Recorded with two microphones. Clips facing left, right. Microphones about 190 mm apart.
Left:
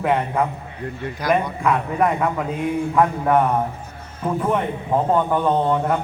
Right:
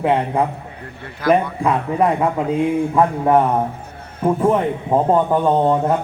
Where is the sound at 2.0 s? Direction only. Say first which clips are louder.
Right 3 dB; 30° right (ahead or behind).